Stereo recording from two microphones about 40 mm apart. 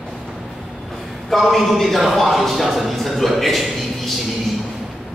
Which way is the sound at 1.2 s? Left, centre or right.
Centre.